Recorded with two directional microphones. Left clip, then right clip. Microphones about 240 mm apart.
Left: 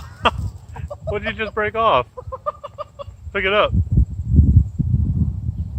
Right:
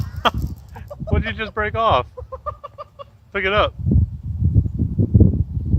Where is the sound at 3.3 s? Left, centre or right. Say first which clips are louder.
Left 1 dB; right.